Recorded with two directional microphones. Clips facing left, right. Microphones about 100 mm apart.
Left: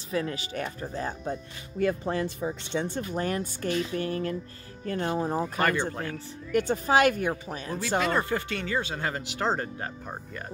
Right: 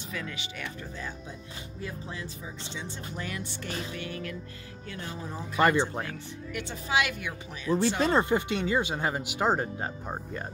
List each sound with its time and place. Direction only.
0.1 s speech: 35° left (ahead or behind)
4.8 s speech: 50° left (ahead or behind)
5.6 s speech: 20° right (ahead or behind)
6.1 s speech: 45° left (ahead or behind)
8.0 s speech: 20° right (ahead or behind)